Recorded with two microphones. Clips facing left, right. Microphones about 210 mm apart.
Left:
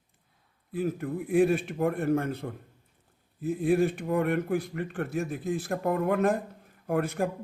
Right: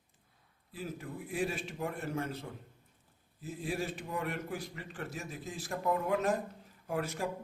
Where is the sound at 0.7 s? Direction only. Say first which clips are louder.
Left 12 dB; 55° left (ahead or behind).